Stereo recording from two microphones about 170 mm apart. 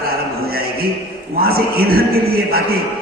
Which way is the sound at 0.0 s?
65° right (ahead or behind).